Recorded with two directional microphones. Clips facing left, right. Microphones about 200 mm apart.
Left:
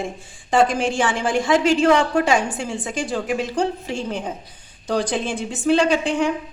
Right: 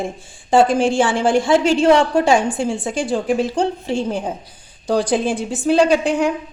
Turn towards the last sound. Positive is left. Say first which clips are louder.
# right 3 dB
turn(degrees=-40)  # may be behind; listen again after turning